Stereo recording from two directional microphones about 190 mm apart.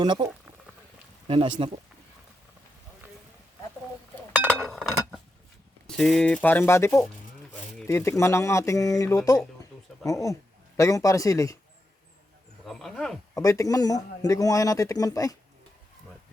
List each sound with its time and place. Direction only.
0.0 s speech: 25° right (ahead or behind)
1.3 s speech: 30° right (ahead or behind)
4.4 s chink: 5° left (ahead or behind)
5.9 s a man's voice: 5° left (ahead or behind)
12.6 s speech: centre (ahead or behind)
13.3 s a man's voice: 15° left (ahead or behind)